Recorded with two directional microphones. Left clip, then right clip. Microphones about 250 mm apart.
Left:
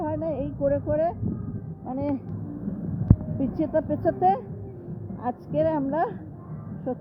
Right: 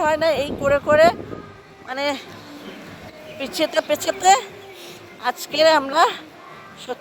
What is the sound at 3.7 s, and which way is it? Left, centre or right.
Speech, centre.